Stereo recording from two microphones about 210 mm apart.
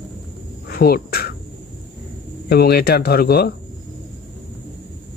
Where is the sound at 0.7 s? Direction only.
45° left (ahead or behind).